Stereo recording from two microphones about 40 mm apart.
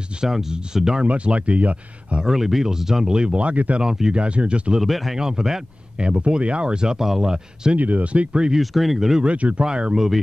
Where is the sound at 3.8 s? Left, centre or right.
Centre.